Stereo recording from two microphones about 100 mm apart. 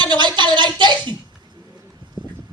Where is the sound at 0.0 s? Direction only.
50° right (ahead or behind).